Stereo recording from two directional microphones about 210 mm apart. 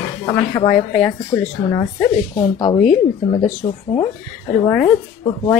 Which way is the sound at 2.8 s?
35° left (ahead or behind).